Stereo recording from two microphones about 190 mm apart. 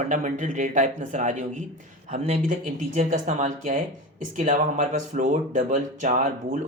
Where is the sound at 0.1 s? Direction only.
40° right (ahead or behind).